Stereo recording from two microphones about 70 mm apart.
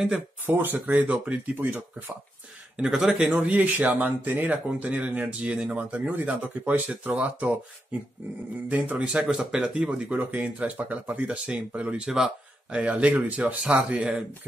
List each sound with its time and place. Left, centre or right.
0.5 s speech: right
2.8 s speech: centre
3.3 s speech: right
8.6 s speech: centre